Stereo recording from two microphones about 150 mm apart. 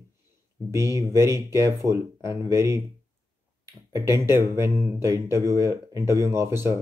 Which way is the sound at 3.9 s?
20° right (ahead or behind).